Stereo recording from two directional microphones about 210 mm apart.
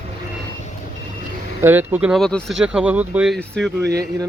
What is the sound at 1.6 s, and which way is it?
Speech, 10° right (ahead or behind).